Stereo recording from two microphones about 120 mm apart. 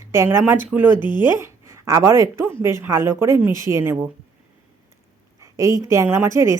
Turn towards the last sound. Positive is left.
turn(degrees=-25)  # may be behind; listen again after turning